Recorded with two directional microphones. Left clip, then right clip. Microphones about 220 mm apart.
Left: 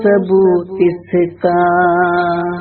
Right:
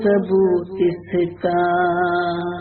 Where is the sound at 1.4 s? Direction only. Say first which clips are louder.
Left 6 dB; 25° left (ahead or behind).